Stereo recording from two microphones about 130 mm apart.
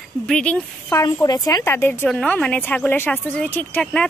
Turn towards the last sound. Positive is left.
turn(degrees=5)  # may be behind; listen again after turning